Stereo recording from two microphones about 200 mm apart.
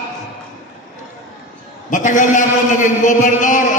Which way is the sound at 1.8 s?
40° left (ahead or behind).